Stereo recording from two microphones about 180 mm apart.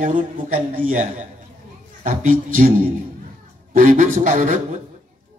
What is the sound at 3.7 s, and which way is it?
Speech, 45° right (ahead or behind).